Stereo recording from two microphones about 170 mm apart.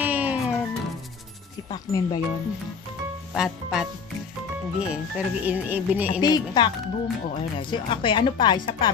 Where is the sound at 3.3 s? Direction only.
5° right (ahead or behind).